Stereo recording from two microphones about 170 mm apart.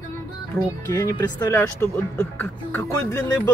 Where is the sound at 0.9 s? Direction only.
15° left (ahead or behind).